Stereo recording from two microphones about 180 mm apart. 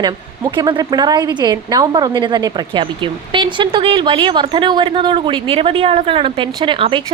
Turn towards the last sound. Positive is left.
turn(degrees=-25)  # may be behind; listen again after turning